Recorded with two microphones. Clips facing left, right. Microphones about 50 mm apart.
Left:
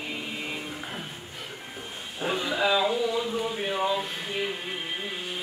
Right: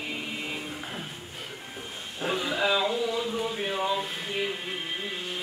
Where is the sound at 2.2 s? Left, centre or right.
Centre.